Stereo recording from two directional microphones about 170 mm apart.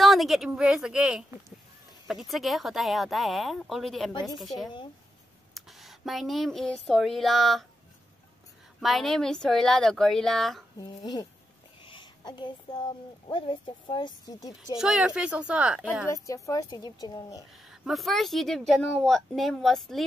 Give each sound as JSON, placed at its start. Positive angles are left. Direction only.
{"t": 0.0, "sound": "speech", "side_deg": 0}
{"t": 5.5, "sound": "a sound", "side_deg": 0}
{"t": 6.7, "sound": "speech", "side_deg": 0}
{"t": 8.8, "sound": "speech", "side_deg": 0}
{"t": 10.8, "sound": "a woman's voice", "side_deg": 25}
{"t": 11.8, "sound": "a sound", "side_deg": 30}
{"t": 13.3, "sound": "a woman's voice", "side_deg": 30}
{"t": 14.8, "sound": "speech", "side_deg": -5}
{"t": 16.1, "sound": "a woman's voice", "side_deg": 20}
{"t": 17.6, "sound": "a woman's voice", "side_deg": 0}